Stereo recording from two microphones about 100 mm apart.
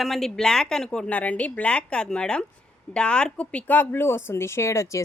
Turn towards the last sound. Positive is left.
turn(degrees=30)  # may be behind; listen again after turning